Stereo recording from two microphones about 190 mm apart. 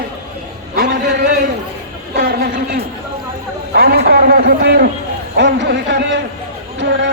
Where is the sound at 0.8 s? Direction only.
50° right (ahead or behind).